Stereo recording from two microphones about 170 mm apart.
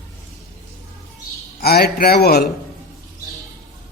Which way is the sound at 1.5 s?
65° left (ahead or behind).